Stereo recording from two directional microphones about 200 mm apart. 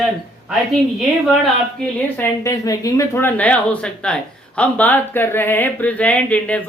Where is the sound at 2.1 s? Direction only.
15° left (ahead or behind).